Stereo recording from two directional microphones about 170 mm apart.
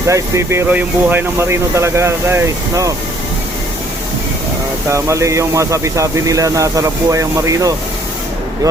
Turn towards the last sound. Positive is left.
turn(degrees=-20)  # may be behind; listen again after turning